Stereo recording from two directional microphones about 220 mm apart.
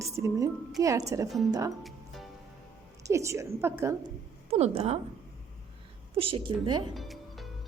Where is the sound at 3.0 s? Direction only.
15° right (ahead or behind).